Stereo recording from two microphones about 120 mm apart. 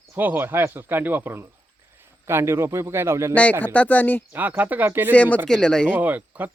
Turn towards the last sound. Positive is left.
turn(degrees=-15)  # may be behind; listen again after turning